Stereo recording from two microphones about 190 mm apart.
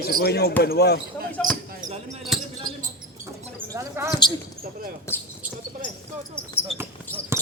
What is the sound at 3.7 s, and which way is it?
Speech, 15° right (ahead or behind).